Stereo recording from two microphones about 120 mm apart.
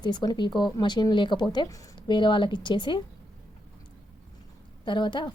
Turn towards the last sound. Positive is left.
turn(degrees=40)  # may be behind; listen again after turning